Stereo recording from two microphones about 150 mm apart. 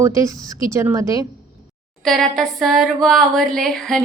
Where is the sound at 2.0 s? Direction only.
Centre (ahead or behind).